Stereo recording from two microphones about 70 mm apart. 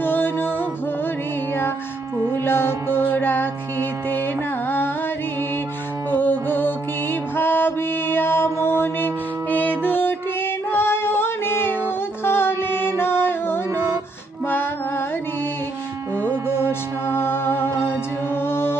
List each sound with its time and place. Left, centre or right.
0.0 s music: left
2.3 s music: left
6.1 s mantra: left
12.2 s music: left
16.5 s music: left